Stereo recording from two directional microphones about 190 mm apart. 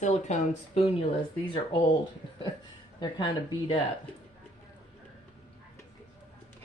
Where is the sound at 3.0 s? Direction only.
25° left (ahead or behind).